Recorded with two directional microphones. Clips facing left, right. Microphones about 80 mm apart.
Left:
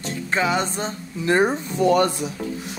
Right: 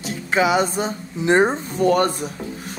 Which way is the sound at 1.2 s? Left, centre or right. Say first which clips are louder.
Right 2 dB; right.